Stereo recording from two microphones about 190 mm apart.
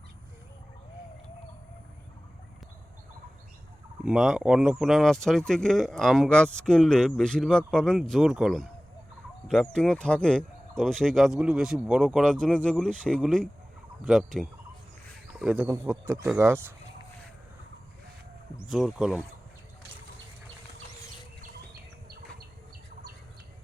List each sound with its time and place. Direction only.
4.0 s speech: centre (ahead or behind)
18.7 s speech: centre (ahead or behind)
22.1 s insect: 55° right (ahead or behind)